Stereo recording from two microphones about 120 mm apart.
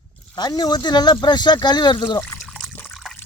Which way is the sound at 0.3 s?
35° left (ahead or behind).